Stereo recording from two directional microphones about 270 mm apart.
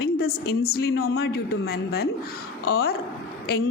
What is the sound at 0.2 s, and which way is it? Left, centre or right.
A woman's voice, left.